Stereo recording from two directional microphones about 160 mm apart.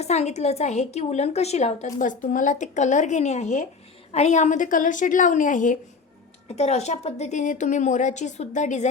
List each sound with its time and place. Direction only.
0.0 s a woman's voice: 45° left (ahead or behind)
6.5 s a woman's voice: 40° left (ahead or behind)